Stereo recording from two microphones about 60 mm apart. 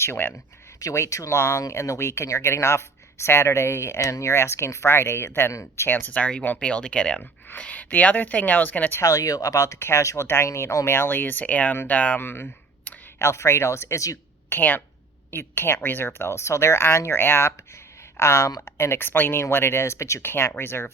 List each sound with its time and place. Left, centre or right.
0.0 s speech: left
0.9 s speech: left
5.9 s speech: left
6.1 s speech: left
9.0 s speech: left
10.9 s speech: left
12.2 s speech: left
13.1 s speech: left
14.5 s speech: left
15.3 s speech: left
18.2 s speech: left